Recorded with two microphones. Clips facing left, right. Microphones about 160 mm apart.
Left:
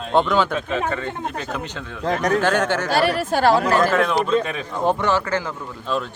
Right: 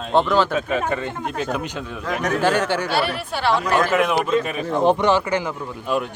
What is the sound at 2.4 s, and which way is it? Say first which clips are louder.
Speech: even; 10° right (ahead or behind).